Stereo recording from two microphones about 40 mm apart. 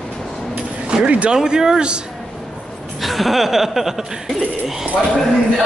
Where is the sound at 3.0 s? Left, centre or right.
Centre.